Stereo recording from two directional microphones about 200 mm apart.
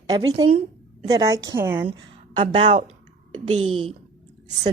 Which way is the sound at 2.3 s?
35° right (ahead or behind).